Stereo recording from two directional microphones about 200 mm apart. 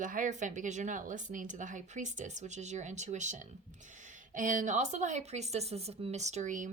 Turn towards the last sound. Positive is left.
turn(degrees=-40)  # may be behind; listen again after turning